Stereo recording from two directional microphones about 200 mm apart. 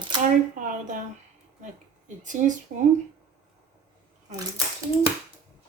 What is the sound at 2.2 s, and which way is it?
Speech, 40° right (ahead or behind).